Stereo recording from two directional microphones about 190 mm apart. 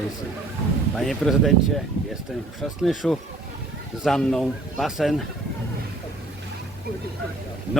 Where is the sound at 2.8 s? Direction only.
Centre (ahead or behind).